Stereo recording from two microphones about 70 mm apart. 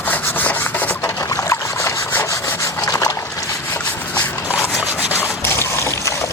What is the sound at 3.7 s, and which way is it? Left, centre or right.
Rub, left.